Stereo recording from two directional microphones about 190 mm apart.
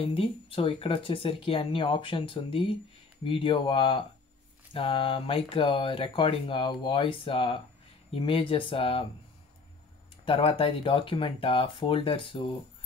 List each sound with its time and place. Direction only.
0.0 s speech: 30° left (ahead or behind)
10.2 s speech: 30° left (ahead or behind)